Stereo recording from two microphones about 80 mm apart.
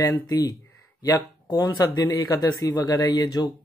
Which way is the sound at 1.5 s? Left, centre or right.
Left.